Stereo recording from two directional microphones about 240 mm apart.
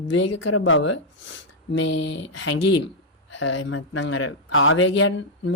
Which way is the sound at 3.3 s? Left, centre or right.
Left.